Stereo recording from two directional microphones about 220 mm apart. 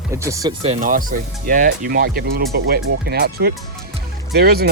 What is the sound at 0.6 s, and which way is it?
Speech, 30° right (ahead or behind).